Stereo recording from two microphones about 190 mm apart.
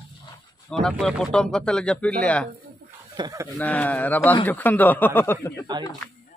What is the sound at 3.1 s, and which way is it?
Speech, 20° right (ahead or behind).